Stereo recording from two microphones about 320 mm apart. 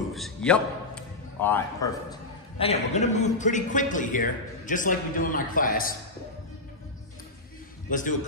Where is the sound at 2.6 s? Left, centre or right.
Centre.